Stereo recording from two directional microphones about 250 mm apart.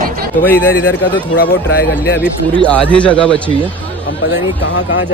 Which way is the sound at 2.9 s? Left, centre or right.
Centre.